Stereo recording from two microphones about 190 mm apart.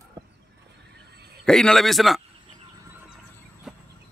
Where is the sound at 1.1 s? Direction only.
60° right (ahead or behind).